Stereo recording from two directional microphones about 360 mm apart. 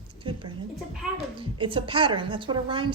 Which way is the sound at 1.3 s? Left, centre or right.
Centre.